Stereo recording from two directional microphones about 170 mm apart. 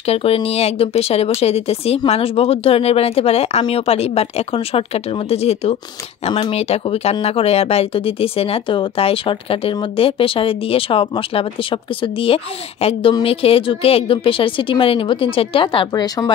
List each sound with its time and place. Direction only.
0.0 s speech: 35° left (ahead or behind)